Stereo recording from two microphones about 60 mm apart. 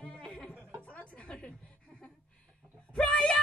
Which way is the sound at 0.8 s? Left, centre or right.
Left.